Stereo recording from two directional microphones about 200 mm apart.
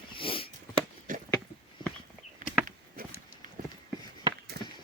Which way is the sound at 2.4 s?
40° right (ahead or behind).